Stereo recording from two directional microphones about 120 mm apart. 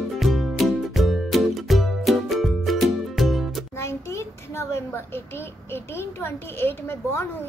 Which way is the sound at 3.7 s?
25° left (ahead or behind).